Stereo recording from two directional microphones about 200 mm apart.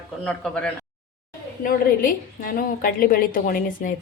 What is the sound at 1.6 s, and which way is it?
A woman's voice, 45° left (ahead or behind).